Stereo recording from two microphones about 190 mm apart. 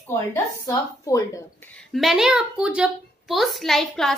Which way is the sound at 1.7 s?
Centre (ahead or behind).